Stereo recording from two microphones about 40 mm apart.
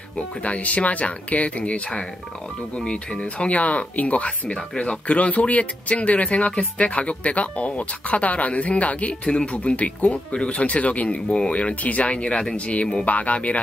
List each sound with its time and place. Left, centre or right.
0.4 s speech: left
1.6 s speech: left
3.5 s speech: left
9.3 s speech: centre
9.6 s speech: left